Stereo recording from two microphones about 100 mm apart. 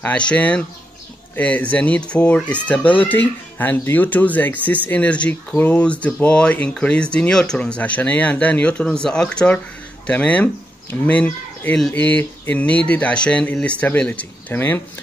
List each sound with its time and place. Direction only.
0.0 s speech: 10° left (ahead or behind)